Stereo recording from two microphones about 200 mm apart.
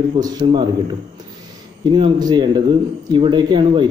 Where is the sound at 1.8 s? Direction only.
20° right (ahead or behind).